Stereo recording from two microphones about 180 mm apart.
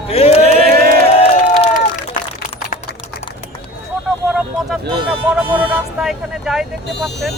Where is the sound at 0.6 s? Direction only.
55° right (ahead or behind).